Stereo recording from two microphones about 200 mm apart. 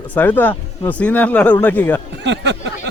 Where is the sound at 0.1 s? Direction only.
10° left (ahead or behind).